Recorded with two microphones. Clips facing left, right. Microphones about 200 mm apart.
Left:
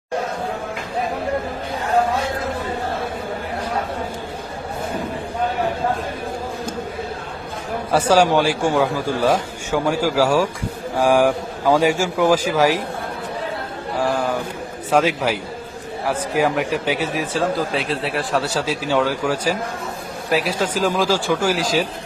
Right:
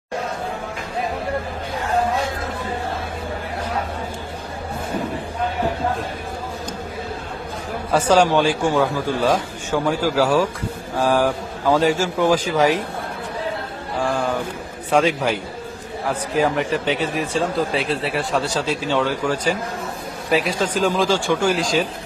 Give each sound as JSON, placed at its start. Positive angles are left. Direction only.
{"t": 7.9, "sound": "speech", "side_deg": 10}
{"t": 14.0, "sound": "speech", "side_deg": 5}